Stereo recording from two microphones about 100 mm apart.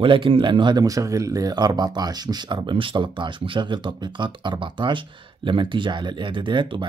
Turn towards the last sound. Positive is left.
turn(degrees=-55)  # may be behind; listen again after turning